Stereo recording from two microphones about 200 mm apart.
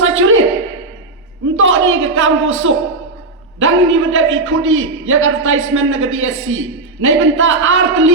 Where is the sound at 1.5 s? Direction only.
80° right.